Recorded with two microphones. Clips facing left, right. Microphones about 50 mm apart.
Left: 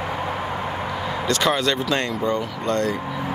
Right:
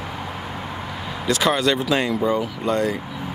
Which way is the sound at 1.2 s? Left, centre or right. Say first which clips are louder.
Right 2 dB; centre.